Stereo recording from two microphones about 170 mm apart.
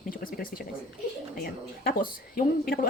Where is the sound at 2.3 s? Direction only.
60° left (ahead or behind).